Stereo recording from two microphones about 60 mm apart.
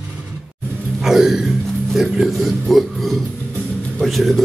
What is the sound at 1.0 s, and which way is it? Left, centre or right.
Music, centre.